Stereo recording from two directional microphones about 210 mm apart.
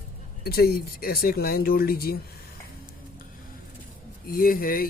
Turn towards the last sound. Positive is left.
turn(degrees=45)  # may be behind; listen again after turning